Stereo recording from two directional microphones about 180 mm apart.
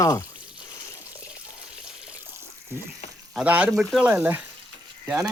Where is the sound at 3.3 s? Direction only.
5° right (ahead or behind).